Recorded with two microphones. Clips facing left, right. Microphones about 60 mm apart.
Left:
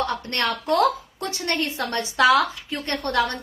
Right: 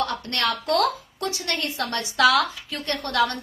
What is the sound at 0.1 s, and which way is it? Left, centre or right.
A woman's voice, left.